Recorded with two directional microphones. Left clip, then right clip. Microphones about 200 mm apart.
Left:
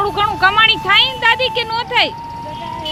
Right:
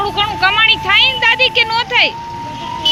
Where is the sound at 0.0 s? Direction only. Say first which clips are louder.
Even; 30° left (ahead or behind); by 2.1 s 10° left (ahead or behind).